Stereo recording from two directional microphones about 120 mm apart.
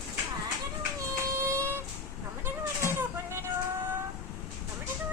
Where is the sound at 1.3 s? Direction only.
20° right (ahead or behind).